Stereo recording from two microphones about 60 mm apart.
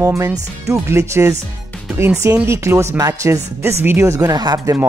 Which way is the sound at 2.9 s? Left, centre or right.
Right.